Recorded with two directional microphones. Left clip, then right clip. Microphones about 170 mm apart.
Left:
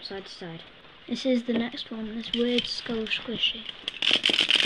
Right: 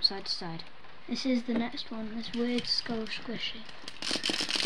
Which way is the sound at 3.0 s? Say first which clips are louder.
Left 9 dB; 20° left (ahead or behind).